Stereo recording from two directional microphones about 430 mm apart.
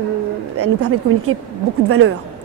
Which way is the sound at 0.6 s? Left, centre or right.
Right.